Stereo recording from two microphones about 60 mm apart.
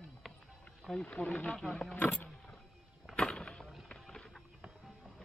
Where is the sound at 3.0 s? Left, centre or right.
Centre.